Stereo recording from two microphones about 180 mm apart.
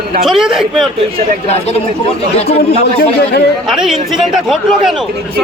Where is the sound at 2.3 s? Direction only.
35° left (ahead or behind).